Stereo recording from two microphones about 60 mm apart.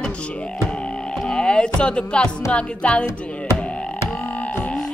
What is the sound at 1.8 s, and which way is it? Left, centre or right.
Speech, centre.